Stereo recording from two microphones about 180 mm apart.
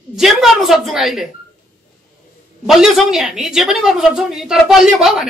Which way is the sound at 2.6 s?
Centre (ahead or behind).